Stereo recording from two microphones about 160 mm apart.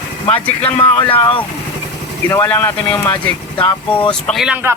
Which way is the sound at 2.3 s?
15° left (ahead or behind).